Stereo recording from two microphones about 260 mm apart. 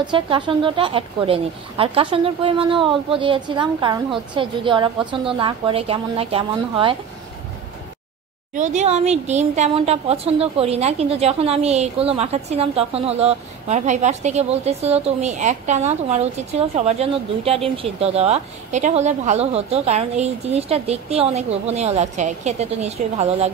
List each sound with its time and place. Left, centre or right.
0.0 s a woman's voice: centre
8.5 s a woman's voice: right